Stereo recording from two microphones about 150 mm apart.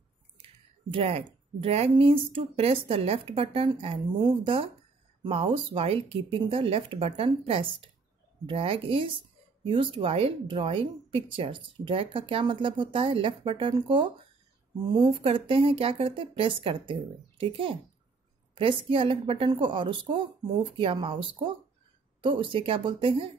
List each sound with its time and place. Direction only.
0.9 s speech: 40° right (ahead or behind)